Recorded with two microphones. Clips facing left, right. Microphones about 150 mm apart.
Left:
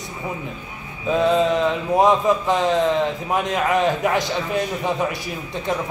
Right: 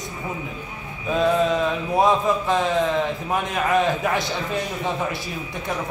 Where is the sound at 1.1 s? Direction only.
20° left (ahead or behind).